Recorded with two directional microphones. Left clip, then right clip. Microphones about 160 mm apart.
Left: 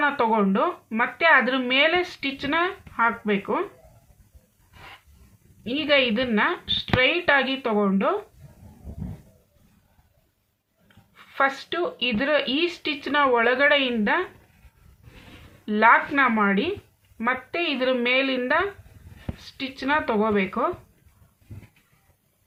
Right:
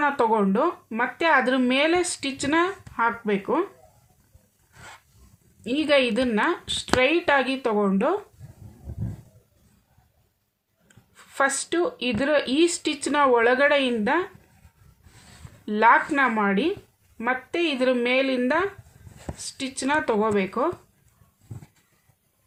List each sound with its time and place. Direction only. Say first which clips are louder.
0.0 s speech: even; 40° right (ahead or behind)
5.6 s a woman's voice: even; 45° right (ahead or behind)
11.1 s speech: even; 40° right (ahead or behind)
15.6 s speech: even; 45° right (ahead or behind)